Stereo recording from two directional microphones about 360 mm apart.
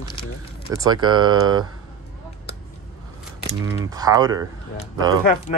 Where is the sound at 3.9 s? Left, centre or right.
Centre.